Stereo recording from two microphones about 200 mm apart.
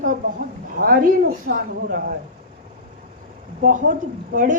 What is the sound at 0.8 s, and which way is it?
A woman's voice, 45° right (ahead or behind).